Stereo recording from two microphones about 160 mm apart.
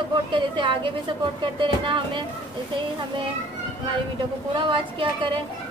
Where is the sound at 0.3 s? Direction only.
30° right (ahead or behind).